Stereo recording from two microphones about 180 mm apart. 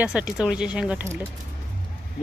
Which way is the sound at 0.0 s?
5° right (ahead or behind).